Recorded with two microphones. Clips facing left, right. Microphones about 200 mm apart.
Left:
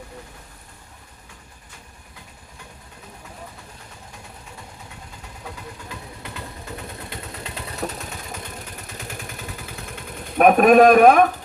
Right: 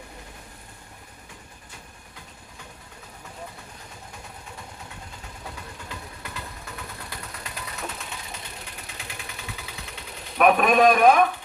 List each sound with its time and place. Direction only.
7.1 s vehicle: 25° left (ahead or behind)
8.9 s vehicle: 45° left (ahead or behind)